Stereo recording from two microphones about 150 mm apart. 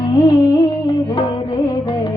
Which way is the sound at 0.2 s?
35° left (ahead or behind).